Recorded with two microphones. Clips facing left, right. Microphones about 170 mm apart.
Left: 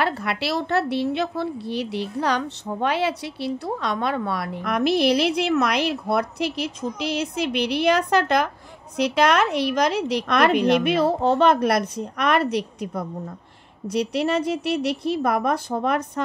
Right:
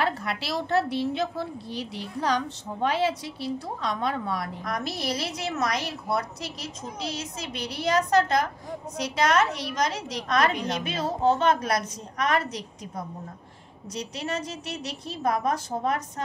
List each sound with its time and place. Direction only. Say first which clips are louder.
0.0 s a woman's voice: left 4 dB; 75° left (ahead or behind)